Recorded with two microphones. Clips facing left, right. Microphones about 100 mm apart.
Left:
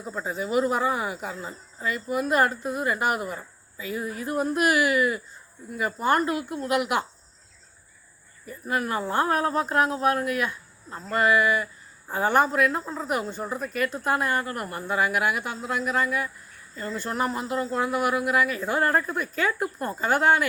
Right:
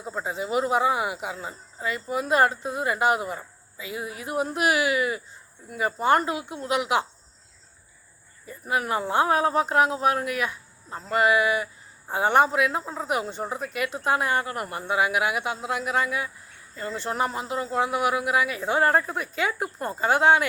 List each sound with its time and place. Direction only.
0.3 s speech: 20° right (ahead or behind)
8.4 s speech: 20° right (ahead or behind)
12.8 s speech: 35° right (ahead or behind)
13.1 s speech: 20° right (ahead or behind)